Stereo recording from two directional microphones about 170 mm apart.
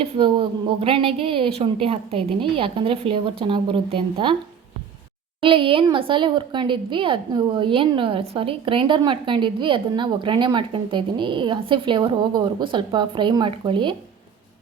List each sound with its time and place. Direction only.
0.0 s a woman's voice: 30° right (ahead or behind)
5.4 s speech: 30° right (ahead or behind)